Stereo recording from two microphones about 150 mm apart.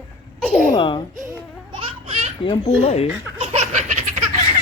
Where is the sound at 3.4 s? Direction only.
45° right (ahead or behind).